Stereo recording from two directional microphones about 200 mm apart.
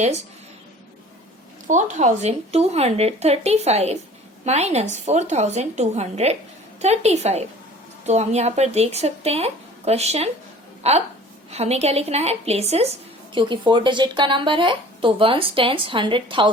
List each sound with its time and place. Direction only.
1.6 s a woman's voice: 35° right (ahead or behind)